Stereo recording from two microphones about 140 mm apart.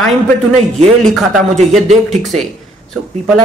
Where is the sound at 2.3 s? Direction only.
50° right (ahead or behind).